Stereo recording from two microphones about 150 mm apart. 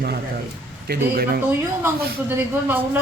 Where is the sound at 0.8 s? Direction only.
90° right.